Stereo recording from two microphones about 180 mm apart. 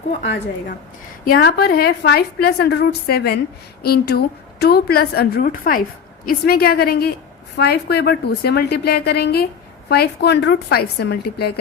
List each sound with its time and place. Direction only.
1.2 s a woman's voice: 55° left (ahead or behind)